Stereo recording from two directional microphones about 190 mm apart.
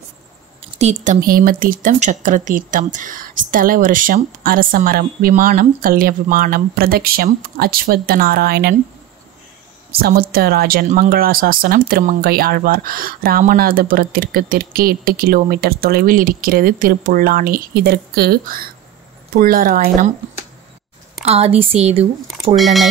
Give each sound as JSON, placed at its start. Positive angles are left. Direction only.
{"t": 0.6, "sound": "speech", "side_deg": -35}
{"t": 9.9, "sound": "speech", "side_deg": -50}
{"t": 21.2, "sound": "a woman's voice", "side_deg": -35}
{"t": 22.6, "sound": "speech", "side_deg": 0}